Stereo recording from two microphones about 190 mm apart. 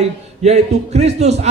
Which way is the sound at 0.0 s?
35° right (ahead or behind).